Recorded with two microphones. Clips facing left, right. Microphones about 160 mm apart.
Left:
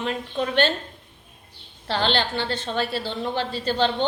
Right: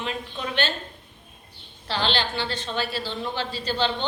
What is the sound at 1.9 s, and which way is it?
A woman's voice, 55° left (ahead or behind).